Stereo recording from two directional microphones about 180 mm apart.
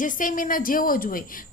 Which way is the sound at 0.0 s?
50° left (ahead or behind).